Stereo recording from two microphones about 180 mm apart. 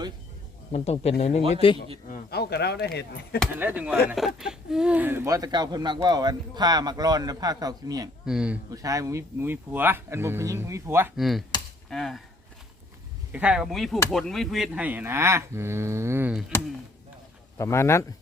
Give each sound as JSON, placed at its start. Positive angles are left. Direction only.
{"t": 0.7, "sound": "speech", "side_deg": 35}
{"t": 1.4, "sound": "a man's voice", "side_deg": -30}
{"t": 2.0, "sound": "speech", "side_deg": 55}
{"t": 3.6, "sound": "speech", "side_deg": -10}
{"t": 8.2, "sound": "speech", "side_deg": -5}
{"t": 8.7, "sound": "speech", "side_deg": -20}
{"t": 11.2, "sound": "speech", "side_deg": 0}
{"t": 13.3, "sound": "speech", "side_deg": -5}
{"t": 17.6, "sound": "speech", "side_deg": 15}